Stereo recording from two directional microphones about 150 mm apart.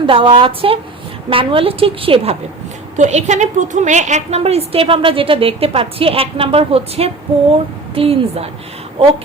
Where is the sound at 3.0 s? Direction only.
50° right (ahead or behind).